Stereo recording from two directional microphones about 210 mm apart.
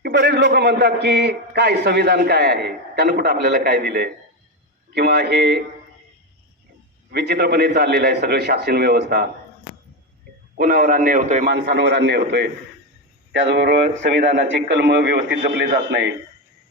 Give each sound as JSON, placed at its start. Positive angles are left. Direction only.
{"t": 0.0, "sound": "a man's voice", "side_deg": -50}
{"t": 7.1, "sound": "a man's voice", "side_deg": -50}
{"t": 10.6, "sound": "a man's voice", "side_deg": -40}